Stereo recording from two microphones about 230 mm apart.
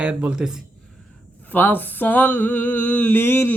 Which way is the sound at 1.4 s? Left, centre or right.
Centre.